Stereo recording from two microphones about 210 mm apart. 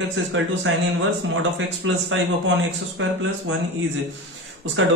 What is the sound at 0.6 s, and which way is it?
A man's voice, 65° right (ahead or behind).